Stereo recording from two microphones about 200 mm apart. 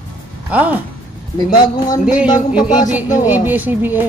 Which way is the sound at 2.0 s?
5° right (ahead or behind).